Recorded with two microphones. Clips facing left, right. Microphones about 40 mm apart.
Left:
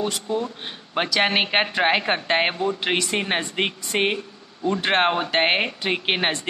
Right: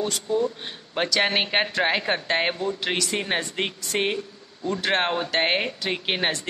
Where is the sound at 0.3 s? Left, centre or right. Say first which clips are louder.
Right 2 dB; left.